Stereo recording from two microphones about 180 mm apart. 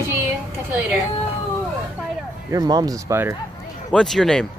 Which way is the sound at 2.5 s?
20° right (ahead or behind).